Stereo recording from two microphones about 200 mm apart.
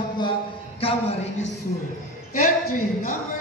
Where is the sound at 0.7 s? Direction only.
30° left (ahead or behind).